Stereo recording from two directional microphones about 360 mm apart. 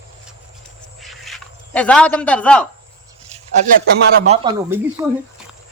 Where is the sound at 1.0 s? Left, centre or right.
Centre.